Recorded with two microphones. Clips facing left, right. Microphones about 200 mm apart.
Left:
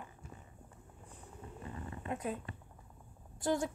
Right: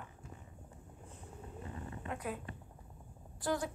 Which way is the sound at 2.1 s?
25° left (ahead or behind).